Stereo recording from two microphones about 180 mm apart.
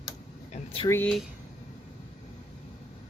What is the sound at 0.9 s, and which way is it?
Speech, 10° left (ahead or behind).